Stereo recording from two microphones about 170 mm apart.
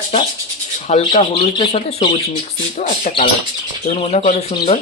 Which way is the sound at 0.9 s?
40° left (ahead or behind).